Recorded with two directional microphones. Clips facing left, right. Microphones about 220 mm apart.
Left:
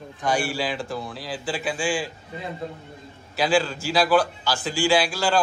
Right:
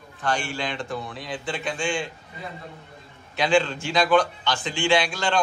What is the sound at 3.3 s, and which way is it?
A man's voice, 5° left (ahead or behind).